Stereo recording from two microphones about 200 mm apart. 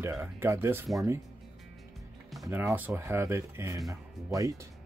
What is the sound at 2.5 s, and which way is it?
Speech, 10° right (ahead or behind).